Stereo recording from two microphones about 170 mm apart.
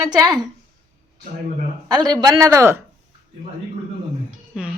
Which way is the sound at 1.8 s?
25° right (ahead or behind).